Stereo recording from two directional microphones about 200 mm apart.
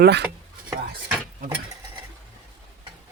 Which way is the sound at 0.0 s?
55° right (ahead or behind).